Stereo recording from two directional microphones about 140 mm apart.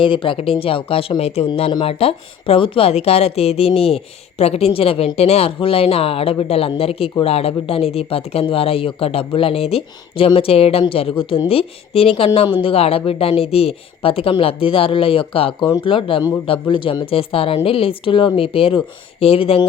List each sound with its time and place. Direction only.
0.0 s a woman's voice: 35° left (ahead or behind)